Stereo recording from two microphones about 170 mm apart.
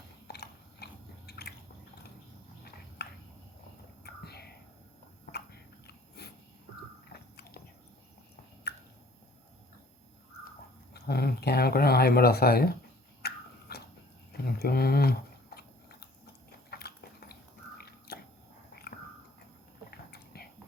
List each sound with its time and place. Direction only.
0.3 s horse: 75° left (ahead or behind)
1.3 s drip: 70° left (ahead or behind)
3.0 s a sound: 70° left (ahead or behind)
4.0 s whispering: 70° left (ahead or behind)
6.2 s a sound: 70° left (ahead or behind)
7.1 s biting: 70° left (ahead or behind)
8.7 s drip: 75° left (ahead or behind)
10.9 s speech: 70° left (ahead or behind)
13.2 s a sound: 70° left (ahead or behind)
14.4 s chewing: 65° left (ahead or behind)
17.7 s biting: 70° left (ahead or behind)
19.9 s a sound: 65° left (ahead or behind)